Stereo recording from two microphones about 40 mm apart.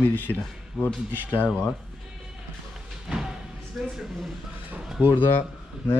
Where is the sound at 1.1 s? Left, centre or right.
Right.